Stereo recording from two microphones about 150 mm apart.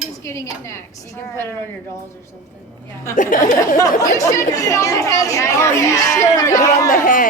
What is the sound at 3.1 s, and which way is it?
Speech, 65° left (ahead or behind).